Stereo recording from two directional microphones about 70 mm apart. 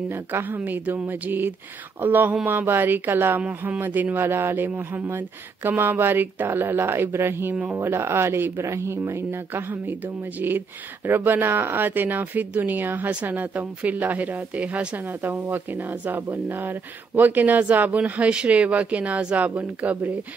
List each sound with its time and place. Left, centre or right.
0.1 s speech: right